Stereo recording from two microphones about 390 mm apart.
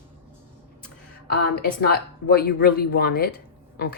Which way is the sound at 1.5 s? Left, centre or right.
Left.